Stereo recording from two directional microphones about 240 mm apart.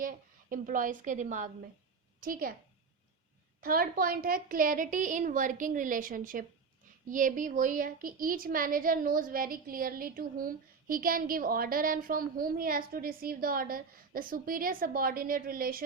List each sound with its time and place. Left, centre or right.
0.0 s a woman's voice: right
3.6 s a woman's voice: right